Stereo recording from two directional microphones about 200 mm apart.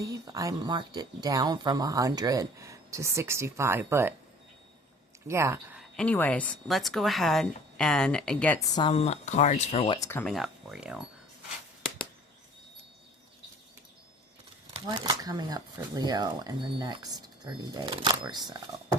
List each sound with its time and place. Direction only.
0.0 s speech: 15° right (ahead or behind)
5.3 s speech: 15° right (ahead or behind)
6.0 s a woman's voice: 5° left (ahead or behind)
8.9 s speech: 35° left (ahead or behind)
10.0 s speech: 10° left (ahead or behind)
10.3 s a woman's voice: centre (ahead or behind)
14.7 s speech: 20° right (ahead or behind)